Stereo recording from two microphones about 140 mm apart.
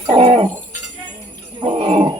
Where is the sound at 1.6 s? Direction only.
40° right (ahead or behind).